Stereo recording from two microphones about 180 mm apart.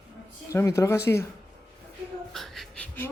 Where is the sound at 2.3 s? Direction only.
Centre (ahead or behind).